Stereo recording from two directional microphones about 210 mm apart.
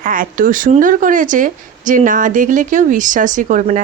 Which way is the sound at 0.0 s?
40° right (ahead or behind).